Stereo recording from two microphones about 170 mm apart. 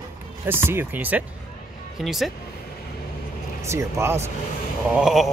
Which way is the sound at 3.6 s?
15° right (ahead or behind).